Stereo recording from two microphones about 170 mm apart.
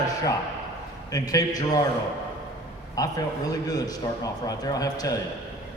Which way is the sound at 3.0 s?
20° left (ahead or behind).